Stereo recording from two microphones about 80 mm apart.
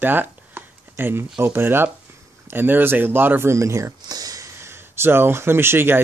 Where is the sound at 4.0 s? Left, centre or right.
Right.